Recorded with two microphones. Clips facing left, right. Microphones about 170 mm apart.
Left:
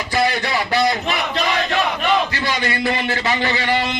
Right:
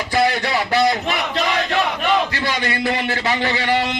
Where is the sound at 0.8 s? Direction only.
25° right (ahead or behind).